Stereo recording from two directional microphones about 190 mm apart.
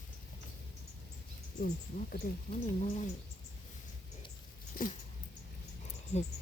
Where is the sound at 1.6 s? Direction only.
50° left (ahead or behind).